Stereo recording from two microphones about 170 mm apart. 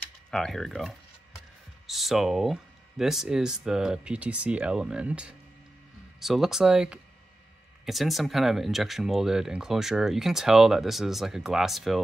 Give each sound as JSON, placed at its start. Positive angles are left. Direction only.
{"t": 0.3, "sound": "speech", "side_deg": 5}